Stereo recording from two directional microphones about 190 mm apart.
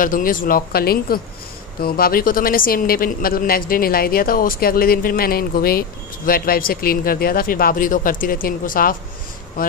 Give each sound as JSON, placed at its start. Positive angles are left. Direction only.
{"t": 0.0, "sound": "speech", "side_deg": 45}